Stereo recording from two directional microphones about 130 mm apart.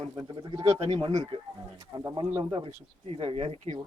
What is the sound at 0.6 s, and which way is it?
Speech, 50° right (ahead or behind).